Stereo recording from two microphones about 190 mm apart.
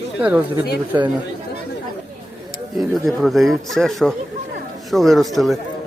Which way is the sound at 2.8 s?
Centre (ahead or behind).